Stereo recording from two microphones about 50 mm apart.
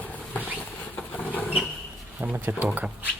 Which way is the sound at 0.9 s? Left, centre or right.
Left.